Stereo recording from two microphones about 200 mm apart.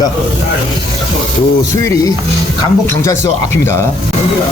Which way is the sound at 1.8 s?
15° left (ahead or behind).